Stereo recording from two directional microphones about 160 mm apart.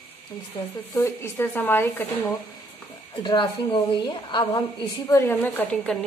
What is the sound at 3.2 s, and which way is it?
A woman's voice, 30° left (ahead or behind).